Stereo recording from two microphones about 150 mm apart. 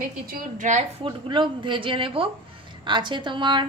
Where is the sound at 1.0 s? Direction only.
30° right (ahead or behind).